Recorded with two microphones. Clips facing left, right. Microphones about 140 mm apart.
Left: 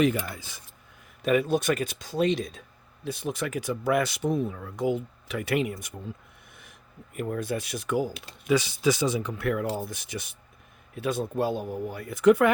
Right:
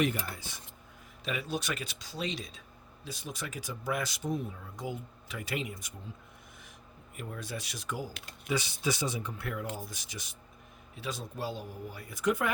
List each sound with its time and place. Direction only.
1.2 s speech: 50° left (ahead or behind)
7.2 s speech: 55° left (ahead or behind)
8.4 s speech: 90° left
9.7 s speech: 60° left (ahead or behind)